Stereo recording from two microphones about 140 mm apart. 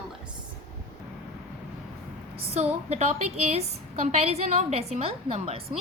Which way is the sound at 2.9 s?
50° right (ahead or behind).